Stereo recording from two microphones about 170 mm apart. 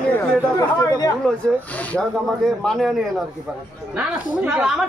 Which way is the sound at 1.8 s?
5° left (ahead or behind).